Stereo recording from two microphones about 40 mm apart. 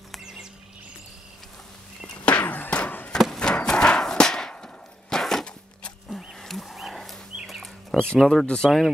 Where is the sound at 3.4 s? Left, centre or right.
Centre.